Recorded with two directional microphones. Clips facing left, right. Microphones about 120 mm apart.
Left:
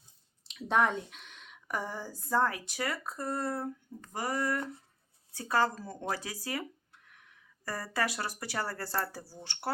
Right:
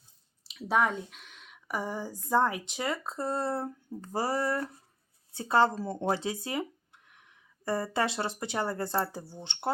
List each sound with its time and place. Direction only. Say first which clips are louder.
0.4 s speech: right 1 dB; 5° right (ahead or behind); by 9.7 s 20° right (ahead or behind)